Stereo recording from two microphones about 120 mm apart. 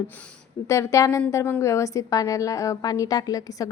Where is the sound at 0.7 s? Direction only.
25° left (ahead or behind).